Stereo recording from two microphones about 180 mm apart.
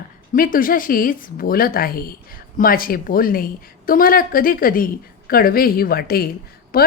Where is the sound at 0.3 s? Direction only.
50° left (ahead or behind).